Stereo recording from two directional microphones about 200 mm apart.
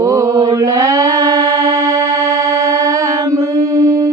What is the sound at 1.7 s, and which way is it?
Music, 15° right (ahead or behind).